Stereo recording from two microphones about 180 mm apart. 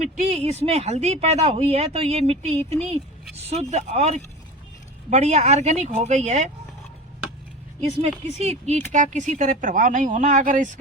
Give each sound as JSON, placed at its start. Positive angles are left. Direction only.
{"t": 0.0, "sound": "speech", "side_deg": -35}
{"t": 8.4, "sound": "speech", "side_deg": -40}